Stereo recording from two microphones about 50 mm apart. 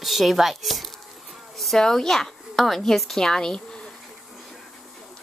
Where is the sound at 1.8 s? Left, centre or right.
Centre.